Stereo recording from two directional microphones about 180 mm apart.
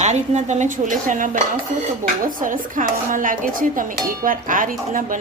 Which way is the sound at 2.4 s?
50° right (ahead or behind).